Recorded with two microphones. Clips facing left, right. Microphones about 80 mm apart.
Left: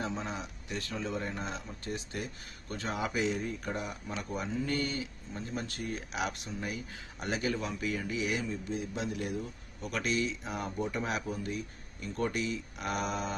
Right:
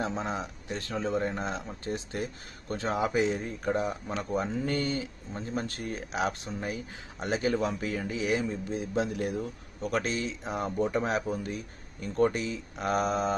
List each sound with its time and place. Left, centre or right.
0.0 s speech: right